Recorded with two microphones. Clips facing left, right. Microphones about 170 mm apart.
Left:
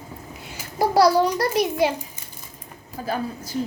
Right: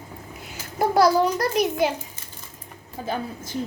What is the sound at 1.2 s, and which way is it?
Child singing, centre (ahead or behind).